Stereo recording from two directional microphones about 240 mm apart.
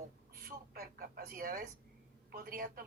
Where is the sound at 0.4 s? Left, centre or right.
Right.